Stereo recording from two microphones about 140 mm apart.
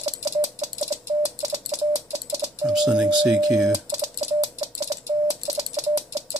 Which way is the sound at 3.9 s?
50° right (ahead or behind).